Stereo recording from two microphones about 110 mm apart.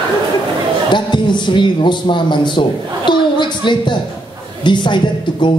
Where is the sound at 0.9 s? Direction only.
45° left (ahead or behind).